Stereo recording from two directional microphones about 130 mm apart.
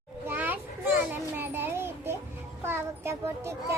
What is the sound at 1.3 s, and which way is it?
Speech, 15° right (ahead or behind).